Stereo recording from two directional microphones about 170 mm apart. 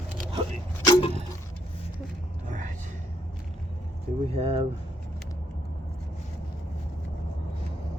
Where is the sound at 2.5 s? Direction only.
50° right (ahead or behind).